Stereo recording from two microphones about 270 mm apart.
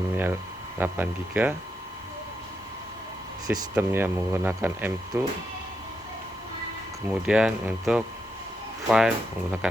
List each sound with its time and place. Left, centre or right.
0.8 s speech: centre
3.4 s speech: centre
7.1 s speech: centre